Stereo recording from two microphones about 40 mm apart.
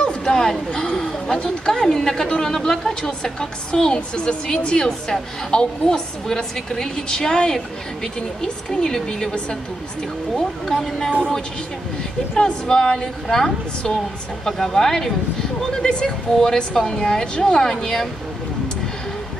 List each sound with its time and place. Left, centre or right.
0.0 s a sound: left
0.9 s a woman's voice: centre
10.3 s speech: centre
12.4 s a woman's voice: centre
13.3 s speech: centre
15.7 s speech: left